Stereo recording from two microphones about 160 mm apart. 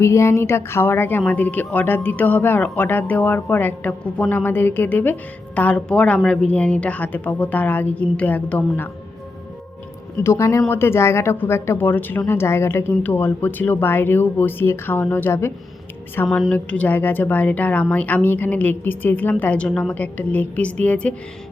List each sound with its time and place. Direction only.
0.0 s speech: 15° left (ahead or behind)
10.2 s speech: 20° left (ahead or behind)
16.2 s speech: 5° left (ahead or behind)